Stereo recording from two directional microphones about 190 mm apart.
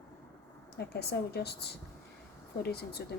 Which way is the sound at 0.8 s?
60° left (ahead or behind).